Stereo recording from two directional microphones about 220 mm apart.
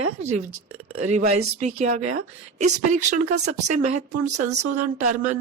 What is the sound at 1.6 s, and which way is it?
Speech, 30° right (ahead or behind).